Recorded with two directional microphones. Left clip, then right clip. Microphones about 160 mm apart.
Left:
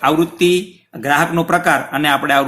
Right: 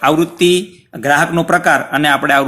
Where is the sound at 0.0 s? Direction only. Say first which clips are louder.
Right 2 dB; 30° right (ahead or behind).